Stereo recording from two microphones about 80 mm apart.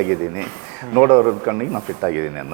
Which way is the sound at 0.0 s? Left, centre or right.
Right.